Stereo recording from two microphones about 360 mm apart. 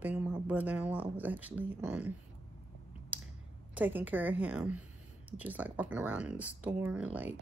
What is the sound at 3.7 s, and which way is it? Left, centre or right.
Speech, centre.